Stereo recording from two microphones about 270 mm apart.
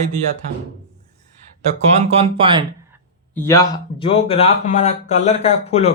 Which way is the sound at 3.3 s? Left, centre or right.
Centre.